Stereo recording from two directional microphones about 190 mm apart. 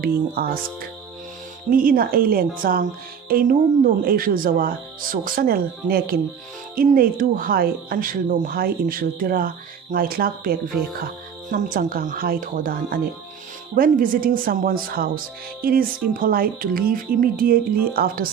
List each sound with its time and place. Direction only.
0.0 s speech: 50° right (ahead or behind)